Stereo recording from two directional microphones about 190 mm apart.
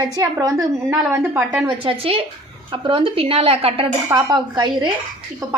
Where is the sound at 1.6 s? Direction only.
30° right (ahead or behind).